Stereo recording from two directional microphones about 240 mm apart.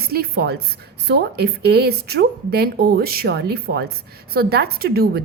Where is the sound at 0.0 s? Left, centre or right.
Right.